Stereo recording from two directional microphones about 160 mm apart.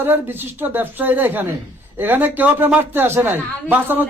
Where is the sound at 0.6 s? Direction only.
10° right (ahead or behind).